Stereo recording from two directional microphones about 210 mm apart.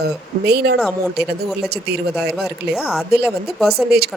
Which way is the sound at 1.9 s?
50° right (ahead or behind).